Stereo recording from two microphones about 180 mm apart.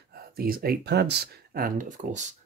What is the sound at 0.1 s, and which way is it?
Speech, 55° right (ahead or behind).